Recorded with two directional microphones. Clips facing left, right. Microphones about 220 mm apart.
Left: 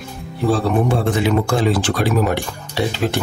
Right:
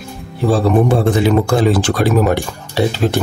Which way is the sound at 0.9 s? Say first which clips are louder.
Right 4 dB; 35° right (ahead or behind).